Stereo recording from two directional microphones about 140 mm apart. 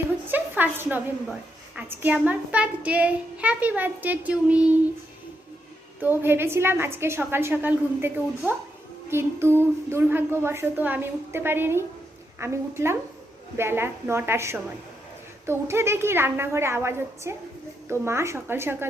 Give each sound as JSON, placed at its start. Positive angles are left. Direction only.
{"t": 0.3, "sound": "a woman's voice", "side_deg": -15}
{"t": 6.0, "sound": "a woman's voice", "side_deg": -15}